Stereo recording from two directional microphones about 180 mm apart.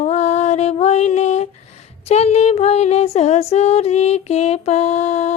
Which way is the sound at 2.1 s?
35° left (ahead or behind).